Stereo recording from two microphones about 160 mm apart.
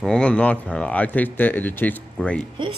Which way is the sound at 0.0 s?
5° left (ahead or behind).